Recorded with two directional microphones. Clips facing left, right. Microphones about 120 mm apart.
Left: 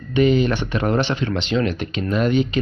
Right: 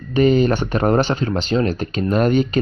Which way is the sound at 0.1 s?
40° right (ahead or behind).